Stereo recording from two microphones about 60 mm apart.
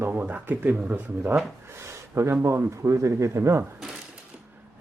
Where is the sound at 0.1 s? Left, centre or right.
Right.